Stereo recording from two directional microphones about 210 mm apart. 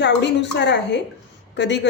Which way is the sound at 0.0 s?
55° left (ahead or behind).